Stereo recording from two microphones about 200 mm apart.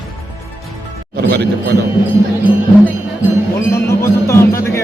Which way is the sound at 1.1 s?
55° right (ahead or behind).